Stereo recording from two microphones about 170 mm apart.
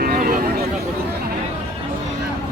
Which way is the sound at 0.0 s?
60° right (ahead or behind).